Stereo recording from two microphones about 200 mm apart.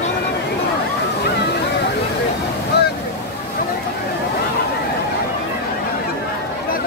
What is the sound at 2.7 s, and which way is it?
Waves, 55° left (ahead or behind).